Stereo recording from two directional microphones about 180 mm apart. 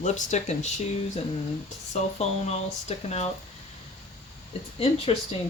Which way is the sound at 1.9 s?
40° left (ahead or behind).